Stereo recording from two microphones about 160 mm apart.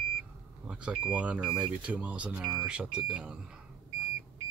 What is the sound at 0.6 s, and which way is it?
Speech, 5° right (ahead or behind).